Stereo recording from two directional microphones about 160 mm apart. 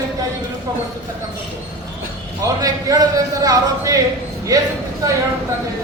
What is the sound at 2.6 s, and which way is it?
Speech, 20° right (ahead or behind).